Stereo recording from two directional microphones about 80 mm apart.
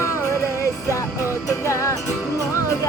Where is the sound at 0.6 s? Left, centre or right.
Left.